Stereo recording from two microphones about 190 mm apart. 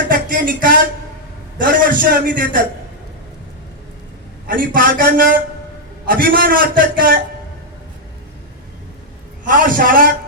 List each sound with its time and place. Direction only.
0.1 s a sound: 45° right (ahead or behind)
1.5 s a man's voice: 45° right (ahead or behind)
4.4 s a man's voice: 45° right (ahead or behind)
9.4 s a man's voice: 45° right (ahead or behind)